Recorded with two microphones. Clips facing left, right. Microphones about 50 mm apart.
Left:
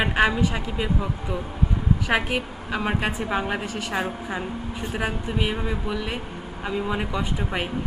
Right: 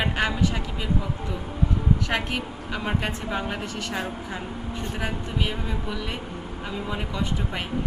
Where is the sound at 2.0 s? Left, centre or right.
Centre.